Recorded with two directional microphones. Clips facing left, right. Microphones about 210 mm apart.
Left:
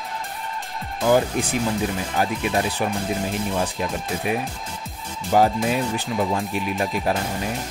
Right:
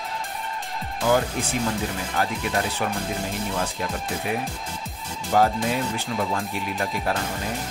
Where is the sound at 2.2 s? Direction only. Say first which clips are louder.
Left 3 dB; 15° left (ahead or behind).